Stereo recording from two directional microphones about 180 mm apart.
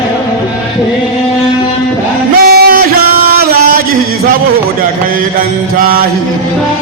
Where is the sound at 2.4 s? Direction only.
60° right (ahead or behind).